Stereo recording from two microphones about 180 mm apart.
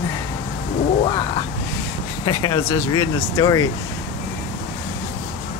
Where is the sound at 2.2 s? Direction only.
25° left (ahead or behind).